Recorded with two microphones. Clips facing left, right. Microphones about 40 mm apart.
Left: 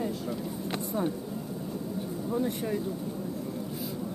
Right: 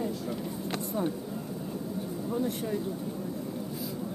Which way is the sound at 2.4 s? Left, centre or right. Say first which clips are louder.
Left 1 dB; left.